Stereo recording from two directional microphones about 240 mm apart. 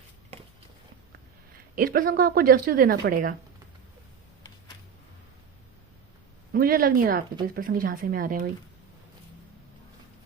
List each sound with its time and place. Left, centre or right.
1.7 s a woman's voice: right
6.5 s a woman's voice: right